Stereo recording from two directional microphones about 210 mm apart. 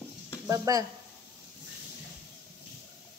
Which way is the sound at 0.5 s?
15° right (ahead or behind).